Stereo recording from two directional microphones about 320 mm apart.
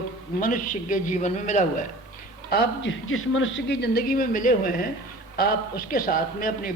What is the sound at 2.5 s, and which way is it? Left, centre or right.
A man's voice, left.